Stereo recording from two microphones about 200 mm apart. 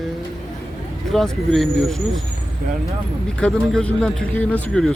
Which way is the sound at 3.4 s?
5° left (ahead or behind).